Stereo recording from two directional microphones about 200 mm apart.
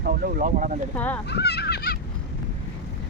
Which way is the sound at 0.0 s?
45° right (ahead or behind).